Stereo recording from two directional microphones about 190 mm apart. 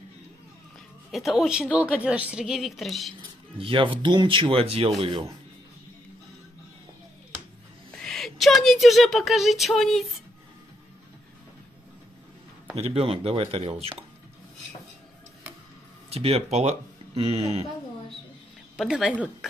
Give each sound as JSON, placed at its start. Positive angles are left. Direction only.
{"t": 1.1, "sound": "a woman's voice", "side_deg": 0}
{"t": 3.2, "sound": "speech", "side_deg": -25}
{"t": 8.0, "sound": "speech", "side_deg": 0}
{"t": 12.7, "sound": "speech", "side_deg": -30}
{"t": 16.1, "sound": "speech", "side_deg": -30}
{"t": 18.8, "sound": "a woman's voice", "side_deg": 0}